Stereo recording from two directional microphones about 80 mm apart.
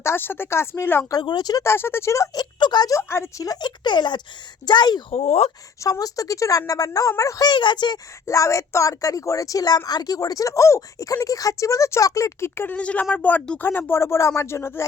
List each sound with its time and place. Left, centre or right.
0.0 s speech: left
1.2 s speech: left
1.6 s speech: left
2.3 s speech: left
2.9 s speech: left
3.4 s speech: left
5.8 s a woman's voice: left
7.4 s speech: left
8.3 s a woman's voice: left
12.5 s speech: left